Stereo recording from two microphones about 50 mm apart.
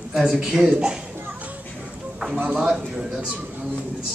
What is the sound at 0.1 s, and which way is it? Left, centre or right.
Speech, centre.